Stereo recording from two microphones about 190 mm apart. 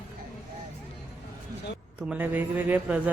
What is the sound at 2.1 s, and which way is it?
Speech, 10° right (ahead or behind).